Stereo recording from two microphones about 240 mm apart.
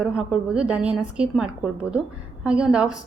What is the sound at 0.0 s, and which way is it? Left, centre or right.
A woman's voice, centre.